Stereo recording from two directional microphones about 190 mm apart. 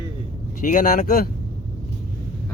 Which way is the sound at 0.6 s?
45° left (ahead or behind).